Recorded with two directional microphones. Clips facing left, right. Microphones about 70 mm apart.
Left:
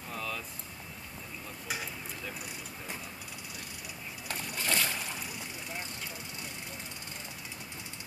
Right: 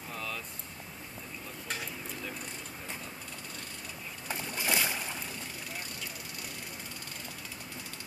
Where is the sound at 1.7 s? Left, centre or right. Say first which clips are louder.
Even; centre.